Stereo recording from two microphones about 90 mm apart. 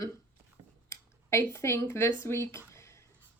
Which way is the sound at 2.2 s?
30° left (ahead or behind).